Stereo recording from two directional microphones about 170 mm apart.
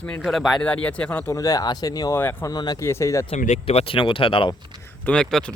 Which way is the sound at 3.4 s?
40° left (ahead or behind).